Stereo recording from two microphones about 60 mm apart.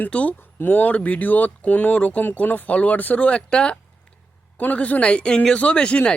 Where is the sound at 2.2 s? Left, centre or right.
Left.